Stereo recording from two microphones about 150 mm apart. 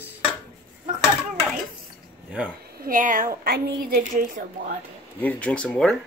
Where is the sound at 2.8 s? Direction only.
65° right (ahead or behind).